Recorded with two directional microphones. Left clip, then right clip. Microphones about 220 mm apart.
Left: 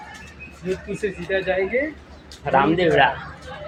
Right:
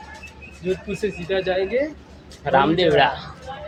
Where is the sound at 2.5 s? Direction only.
10° right (ahead or behind).